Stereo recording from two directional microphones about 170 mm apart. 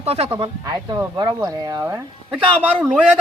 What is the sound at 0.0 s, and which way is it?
Speech, 35° right (ahead or behind).